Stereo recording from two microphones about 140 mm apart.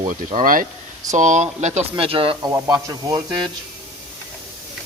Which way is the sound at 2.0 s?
40° right (ahead or behind).